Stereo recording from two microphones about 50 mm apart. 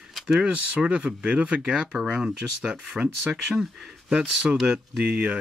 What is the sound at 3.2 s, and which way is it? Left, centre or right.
Speech, centre.